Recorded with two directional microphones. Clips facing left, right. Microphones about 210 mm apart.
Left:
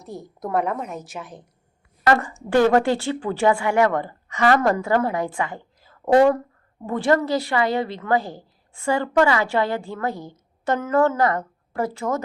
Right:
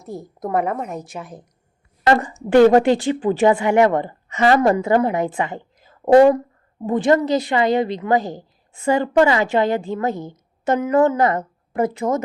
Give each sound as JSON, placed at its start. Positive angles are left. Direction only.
{"t": 0.0, "sound": "a woman's voice", "side_deg": 0}
{"t": 0.6, "sound": "a woman's voice", "side_deg": -50}
{"t": 0.9, "sound": "a woman's voice", "side_deg": 0}
{"t": 2.2, "sound": "a woman's voice", "side_deg": -20}